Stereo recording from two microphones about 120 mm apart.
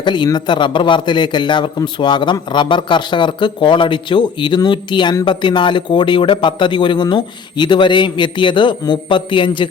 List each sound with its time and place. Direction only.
0.0 s a man's voice: 40° left (ahead or behind)